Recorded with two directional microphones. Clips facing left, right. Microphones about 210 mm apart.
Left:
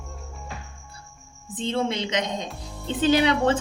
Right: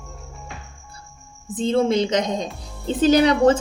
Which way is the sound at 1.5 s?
45° right (ahead or behind).